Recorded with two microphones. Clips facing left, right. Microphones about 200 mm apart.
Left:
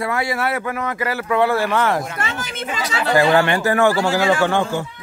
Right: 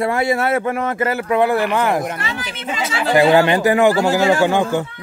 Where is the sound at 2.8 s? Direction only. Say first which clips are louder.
Right 3 dB; 20° right (ahead or behind).